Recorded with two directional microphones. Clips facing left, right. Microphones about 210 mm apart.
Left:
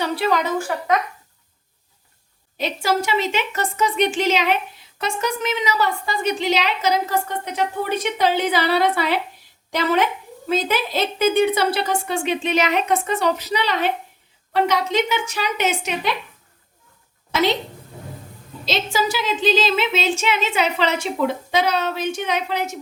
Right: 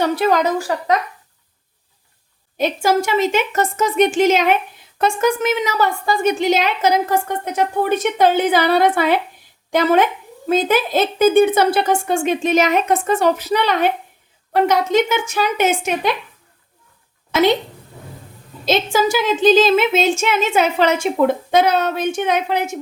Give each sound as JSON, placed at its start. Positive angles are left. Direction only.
{"t": 0.0, "sound": "a woman's voice", "side_deg": -45}
{"t": 2.6, "sound": "a woman's voice", "side_deg": -50}
{"t": 18.6, "sound": "a woman's voice", "side_deg": -50}